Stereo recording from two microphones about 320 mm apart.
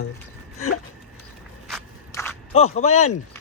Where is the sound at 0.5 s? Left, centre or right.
Left.